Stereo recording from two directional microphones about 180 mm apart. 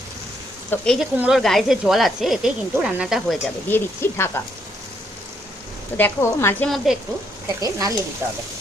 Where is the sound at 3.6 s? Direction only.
10° left (ahead or behind).